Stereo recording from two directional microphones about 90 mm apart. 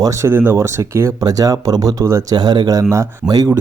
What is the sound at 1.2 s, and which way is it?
Speech, 40° right (ahead or behind).